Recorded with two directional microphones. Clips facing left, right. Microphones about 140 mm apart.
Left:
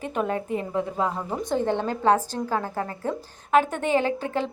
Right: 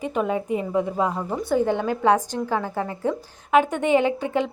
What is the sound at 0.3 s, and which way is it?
Speech, 10° right (ahead or behind).